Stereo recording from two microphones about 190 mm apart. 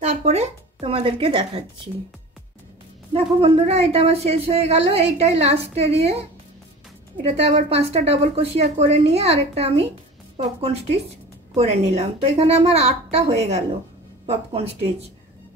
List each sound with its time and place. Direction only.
0.0 s speech: 35° right (ahead or behind)
3.1 s speech: 30° right (ahead or behind)
7.2 s speech: 35° right (ahead or behind)